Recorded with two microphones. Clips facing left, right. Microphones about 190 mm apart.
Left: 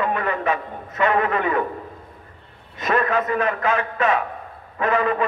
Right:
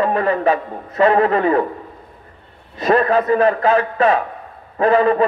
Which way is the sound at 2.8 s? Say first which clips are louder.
Right 6 dB; 35° right (ahead or behind).